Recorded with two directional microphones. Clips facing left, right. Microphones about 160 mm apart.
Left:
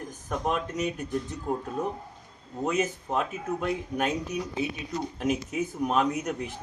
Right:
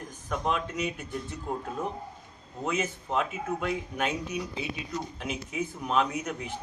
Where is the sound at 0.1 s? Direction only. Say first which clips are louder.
Left 1 dB; 45° left (ahead or behind).